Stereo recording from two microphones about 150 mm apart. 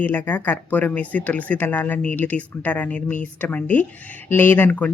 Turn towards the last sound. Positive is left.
turn(degrees=10)  # may be behind; listen again after turning